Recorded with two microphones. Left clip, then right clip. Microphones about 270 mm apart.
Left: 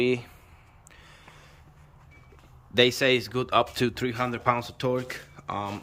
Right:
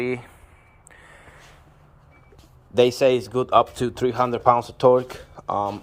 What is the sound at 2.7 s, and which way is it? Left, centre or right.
Speech, centre.